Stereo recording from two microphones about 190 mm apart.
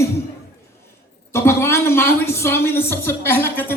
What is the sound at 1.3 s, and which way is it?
A woman's voice, 15° left (ahead or behind).